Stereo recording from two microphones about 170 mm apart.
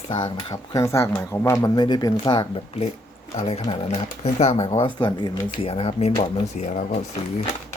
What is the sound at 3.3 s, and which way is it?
Speech, 35° left (ahead or behind).